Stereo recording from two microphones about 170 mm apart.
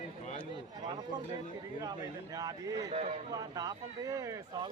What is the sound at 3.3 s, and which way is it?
Speech, 20° right (ahead or behind).